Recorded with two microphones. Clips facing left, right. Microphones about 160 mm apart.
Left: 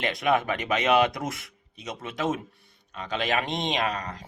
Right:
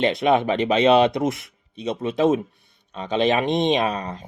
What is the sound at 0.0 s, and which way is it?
Speech, 25° right (ahead or behind).